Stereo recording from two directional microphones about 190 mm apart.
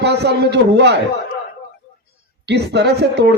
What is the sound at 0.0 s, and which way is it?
Speech, 60° right (ahead or behind).